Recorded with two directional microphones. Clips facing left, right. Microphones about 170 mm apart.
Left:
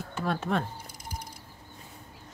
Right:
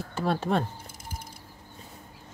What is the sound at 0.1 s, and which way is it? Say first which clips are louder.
Speech: right 3 dB; 30° right (ahead or behind).